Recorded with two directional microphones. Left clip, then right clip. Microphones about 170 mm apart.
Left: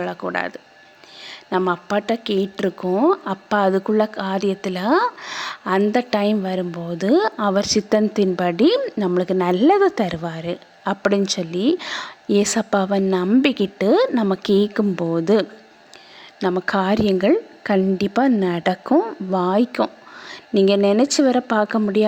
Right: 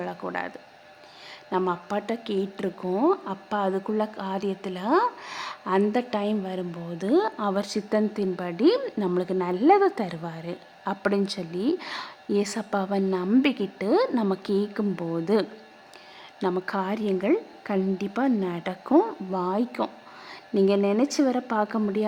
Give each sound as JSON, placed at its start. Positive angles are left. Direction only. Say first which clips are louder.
{"t": 0.0, "sound": "a woman's voice", "louder": "left 7 dB", "side_deg": 25}
{"t": 8.8, "sound": "a woman's voice", "louder": "left 6 dB", "side_deg": 15}
{"t": 18.9, "sound": "speech", "louder": "left 1 dB", "side_deg": 15}
{"t": 19.3, "sound": "speech", "louder": "left 8 dB", "side_deg": 25}